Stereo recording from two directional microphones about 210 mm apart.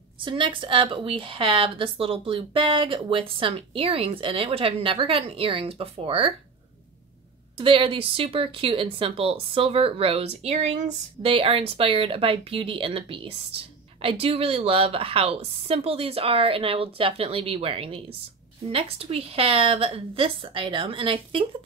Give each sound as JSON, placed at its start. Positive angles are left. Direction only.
{"t": 0.2, "sound": "speech", "side_deg": -25}
{"t": 7.5, "sound": "speech", "side_deg": -25}